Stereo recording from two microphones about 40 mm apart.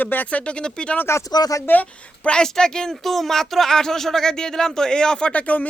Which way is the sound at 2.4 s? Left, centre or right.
Centre.